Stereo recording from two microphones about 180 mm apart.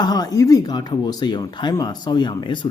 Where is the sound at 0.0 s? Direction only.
20° left (ahead or behind).